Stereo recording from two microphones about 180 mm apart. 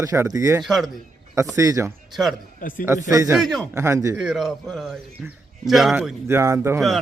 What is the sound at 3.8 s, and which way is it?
Speech, 15° right (ahead or behind).